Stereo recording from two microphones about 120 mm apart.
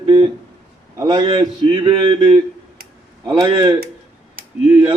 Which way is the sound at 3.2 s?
30° right (ahead or behind).